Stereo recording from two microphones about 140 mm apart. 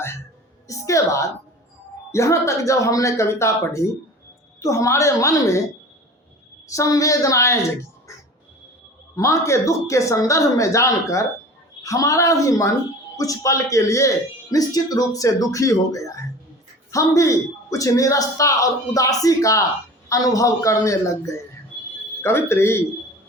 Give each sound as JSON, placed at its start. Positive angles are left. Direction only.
{"t": 0.7, "sound": "a man's voice", "side_deg": 20}
{"t": 6.7, "sound": "a man's voice", "side_deg": 25}
{"t": 9.1, "sound": "a man's voice", "side_deg": 20}